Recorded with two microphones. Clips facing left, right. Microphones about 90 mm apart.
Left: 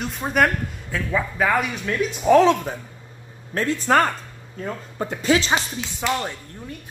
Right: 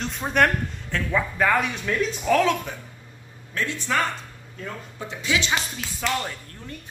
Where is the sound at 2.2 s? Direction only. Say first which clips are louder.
Left 7 dB; 30° left (ahead or behind).